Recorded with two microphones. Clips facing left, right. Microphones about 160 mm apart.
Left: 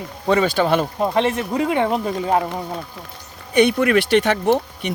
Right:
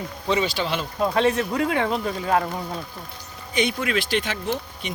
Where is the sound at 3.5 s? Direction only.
60° left (ahead or behind).